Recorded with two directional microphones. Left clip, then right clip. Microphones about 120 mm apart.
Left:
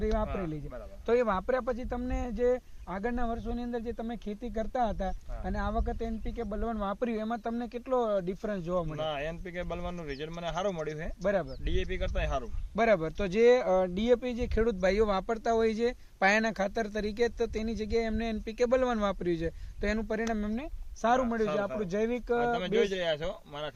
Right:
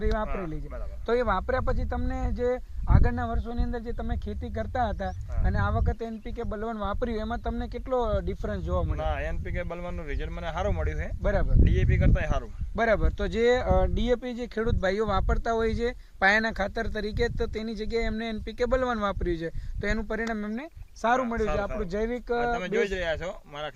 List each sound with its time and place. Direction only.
0.0 s speech: 10° left (ahead or behind)
0.3 s a man's voice: 5° right (ahead or behind)
1.0 s speech: 20° left (ahead or behind)
9.0 s speech: 15° right (ahead or behind)
12.7 s speech: 25° left (ahead or behind)
15.3 s speech: 10° left (ahead or behind)
21.8 s speech: 25° left (ahead or behind)
22.8 s a man's voice: 5° right (ahead or behind)
23.2 s speech: 25° right (ahead or behind)